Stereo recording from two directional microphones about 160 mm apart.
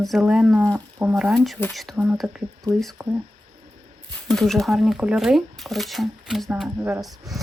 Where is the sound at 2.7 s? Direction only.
25° right (ahead or behind).